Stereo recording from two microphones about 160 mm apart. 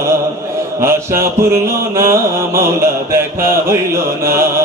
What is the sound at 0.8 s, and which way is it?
Mantra, 15° right (ahead or behind).